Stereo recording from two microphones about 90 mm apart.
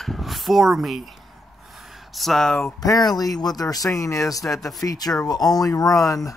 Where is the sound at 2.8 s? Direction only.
45° left (ahead or behind).